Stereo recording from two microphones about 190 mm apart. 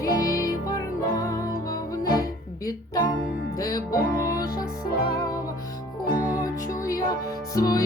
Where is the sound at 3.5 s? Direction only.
20° left (ahead or behind).